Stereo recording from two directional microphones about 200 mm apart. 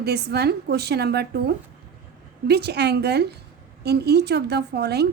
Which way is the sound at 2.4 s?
55° right (ahead or behind).